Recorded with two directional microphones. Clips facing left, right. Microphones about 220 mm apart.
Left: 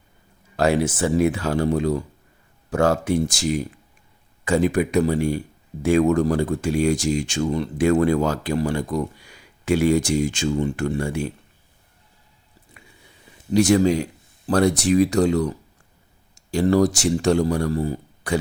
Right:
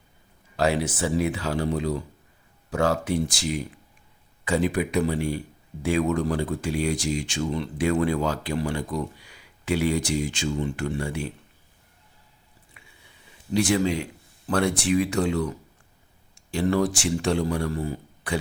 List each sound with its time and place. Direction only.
0.5 s speech: 50° left (ahead or behind)
4.4 s speech: 45° left (ahead or behind)
12.8 s squish: 40° left (ahead or behind)
13.5 s speech: 40° left (ahead or behind)